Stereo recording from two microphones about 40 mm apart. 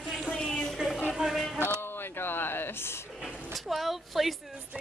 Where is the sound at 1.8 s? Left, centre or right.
Left.